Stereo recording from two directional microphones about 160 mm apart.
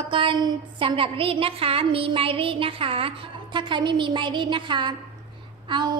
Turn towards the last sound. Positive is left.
turn(degrees=-30)  # may be behind; listen again after turning